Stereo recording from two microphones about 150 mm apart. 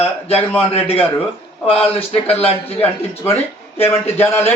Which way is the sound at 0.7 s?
40° left (ahead or behind).